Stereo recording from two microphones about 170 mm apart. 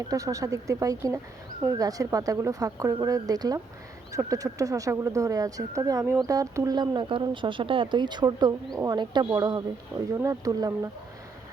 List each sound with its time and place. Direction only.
0.0 s speech: 20° right (ahead or behind)